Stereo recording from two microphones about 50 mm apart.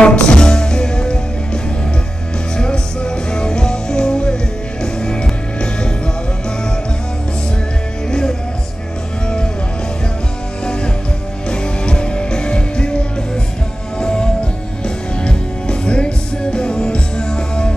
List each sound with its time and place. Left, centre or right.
0.0 s music: centre
8.1 s music: centre
10.6 s music: centre